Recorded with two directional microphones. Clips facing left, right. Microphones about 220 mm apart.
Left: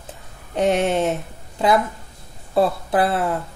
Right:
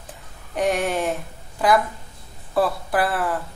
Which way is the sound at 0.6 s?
25° left (ahead or behind).